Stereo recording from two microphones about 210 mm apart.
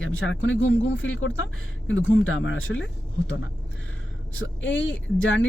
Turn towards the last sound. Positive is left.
turn(degrees=65)  # may be behind; listen again after turning